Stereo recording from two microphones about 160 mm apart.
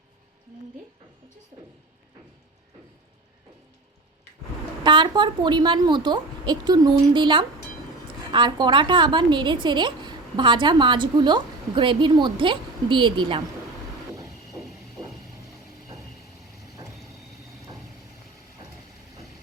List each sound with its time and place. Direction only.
4.8 s a woman's voice: 30° right (ahead or behind)